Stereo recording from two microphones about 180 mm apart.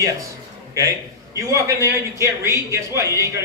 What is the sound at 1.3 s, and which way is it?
A man's voice, 15° right (ahead or behind).